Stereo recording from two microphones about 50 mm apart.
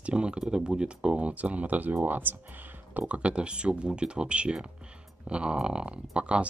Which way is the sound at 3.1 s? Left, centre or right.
Right.